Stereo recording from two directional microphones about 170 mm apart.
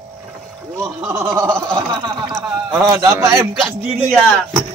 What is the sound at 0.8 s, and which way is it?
Speech, 15° right (ahead or behind).